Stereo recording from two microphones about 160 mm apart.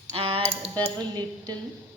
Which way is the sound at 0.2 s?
35° right (ahead or behind).